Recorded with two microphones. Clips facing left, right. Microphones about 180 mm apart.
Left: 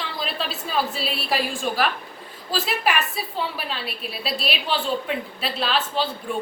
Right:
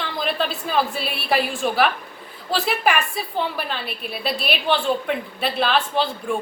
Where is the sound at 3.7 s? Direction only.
Centre (ahead or behind).